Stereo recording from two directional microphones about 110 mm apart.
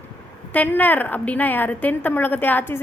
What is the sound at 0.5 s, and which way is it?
A woman's voice, 15° left (ahead or behind).